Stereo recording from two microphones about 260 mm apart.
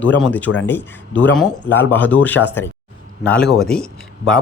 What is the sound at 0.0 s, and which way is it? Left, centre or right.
Speech, centre.